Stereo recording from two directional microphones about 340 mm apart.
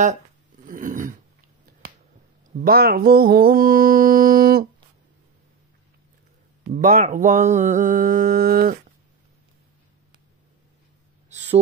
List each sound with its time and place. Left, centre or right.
0.7 s dog: right
2.5 s mantra: right
6.7 s mantra: right
11.2 s a sound: centre